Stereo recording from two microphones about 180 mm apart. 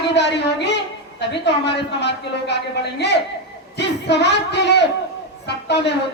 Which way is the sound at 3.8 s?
70° left (ahead or behind).